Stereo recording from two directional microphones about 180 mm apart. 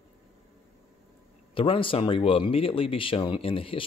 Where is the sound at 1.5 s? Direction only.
30° left (ahead or behind).